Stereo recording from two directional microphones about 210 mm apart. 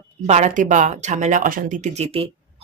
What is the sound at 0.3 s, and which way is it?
Speech, 35° right (ahead or behind).